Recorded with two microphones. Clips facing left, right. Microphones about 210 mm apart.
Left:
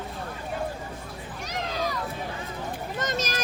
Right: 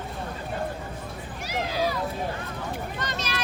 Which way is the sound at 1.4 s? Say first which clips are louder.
Right 3 dB; 10° right (ahead or behind).